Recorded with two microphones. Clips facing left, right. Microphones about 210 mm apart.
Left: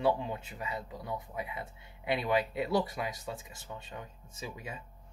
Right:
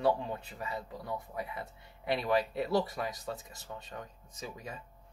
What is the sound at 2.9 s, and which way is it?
Speech, 5° left (ahead or behind).